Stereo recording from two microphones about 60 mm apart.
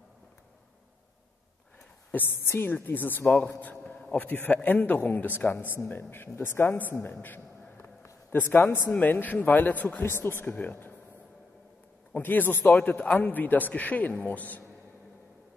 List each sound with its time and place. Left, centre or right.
2.1 s a woman's voice: left
3.9 s a man's voice: left
10.0 s a woman's voice: left
12.1 s a woman's voice: left